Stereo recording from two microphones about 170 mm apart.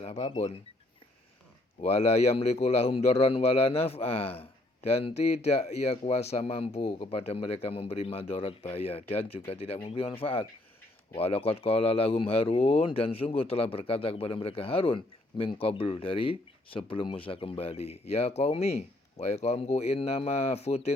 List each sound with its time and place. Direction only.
0.0 s speech: 35° left (ahead or behind)
1.8 s a man's voice: 40° left (ahead or behind)